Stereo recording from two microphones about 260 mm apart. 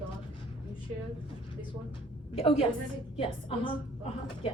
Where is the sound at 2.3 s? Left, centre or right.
Left.